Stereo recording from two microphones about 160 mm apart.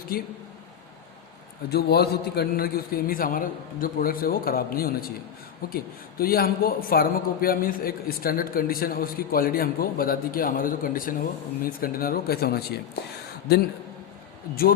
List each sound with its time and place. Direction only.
0.1 s a man's voice: 65° left (ahead or behind)
1.7 s a man's voice: 90° left
14.5 s a man's voice: 70° left (ahead or behind)